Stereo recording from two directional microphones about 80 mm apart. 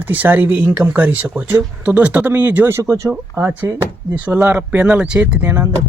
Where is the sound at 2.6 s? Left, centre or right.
Right; by 5.5 s centre.